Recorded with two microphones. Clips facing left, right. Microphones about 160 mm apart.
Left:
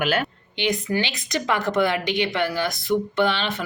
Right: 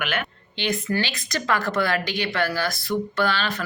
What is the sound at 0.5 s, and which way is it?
Speech, 15° left (ahead or behind).